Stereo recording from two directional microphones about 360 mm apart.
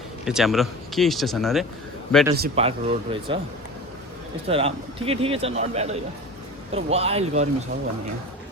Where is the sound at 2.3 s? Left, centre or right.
Right.